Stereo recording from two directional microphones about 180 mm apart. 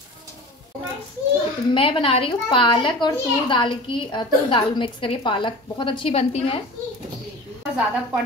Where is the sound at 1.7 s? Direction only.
30° left (ahead or behind).